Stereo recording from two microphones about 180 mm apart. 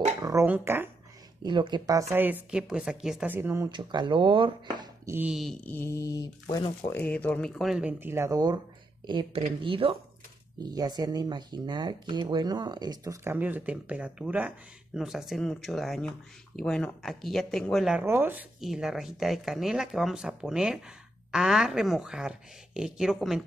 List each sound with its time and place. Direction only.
0.2 s speech: 15° right (ahead or behind)
1.4 s speech: 25° right (ahead or behind)
5.0 s mantra: 10° right (ahead or behind); by 6.2 s 15° left (ahead or behind)
6.9 s speech: 10° left (ahead or behind)
18.0 s speech: 10° right (ahead or behind)
18.6 s speech: centre (ahead or behind)